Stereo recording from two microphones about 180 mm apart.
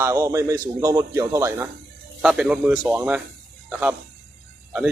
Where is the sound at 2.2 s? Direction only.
5° right (ahead or behind).